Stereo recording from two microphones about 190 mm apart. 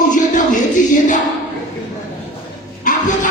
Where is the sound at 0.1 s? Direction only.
45° left (ahead or behind).